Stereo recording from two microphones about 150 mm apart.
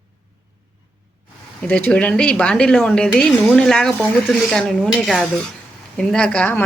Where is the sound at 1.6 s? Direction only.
10° left (ahead or behind).